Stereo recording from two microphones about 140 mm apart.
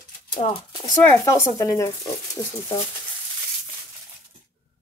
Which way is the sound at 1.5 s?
25° left (ahead or behind).